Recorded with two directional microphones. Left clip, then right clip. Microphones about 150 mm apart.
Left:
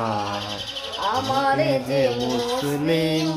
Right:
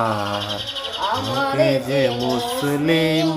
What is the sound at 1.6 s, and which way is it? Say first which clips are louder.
Child singing: right 4 dB; 15° left (ahead or behind).